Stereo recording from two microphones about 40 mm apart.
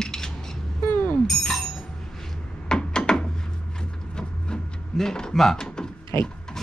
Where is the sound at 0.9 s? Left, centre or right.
Left.